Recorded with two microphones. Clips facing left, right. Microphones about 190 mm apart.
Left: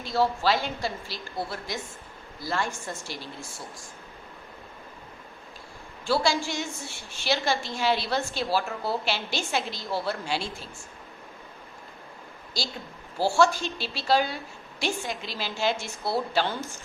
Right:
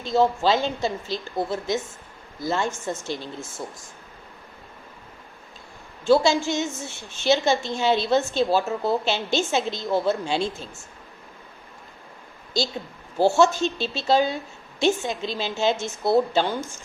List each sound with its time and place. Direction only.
0.0 s a woman's voice: 20° right (ahead or behind)
6.1 s a woman's voice: 20° right (ahead or behind)
13.1 s a woman's voice: 20° right (ahead or behind)